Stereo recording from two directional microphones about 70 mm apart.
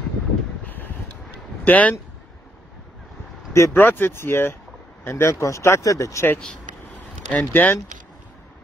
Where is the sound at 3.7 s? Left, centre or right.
Left.